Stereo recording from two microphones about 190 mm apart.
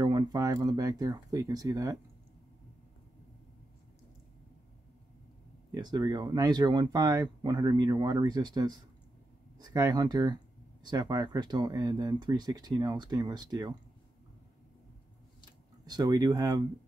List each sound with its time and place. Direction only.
0.0 s speech: 20° right (ahead or behind)
5.8 s speech: 20° right (ahead or behind)
15.8 s speech: 20° right (ahead or behind)